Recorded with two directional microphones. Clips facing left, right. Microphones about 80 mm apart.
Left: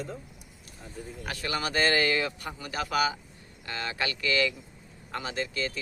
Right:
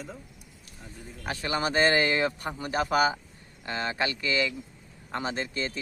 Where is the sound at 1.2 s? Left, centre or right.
Right.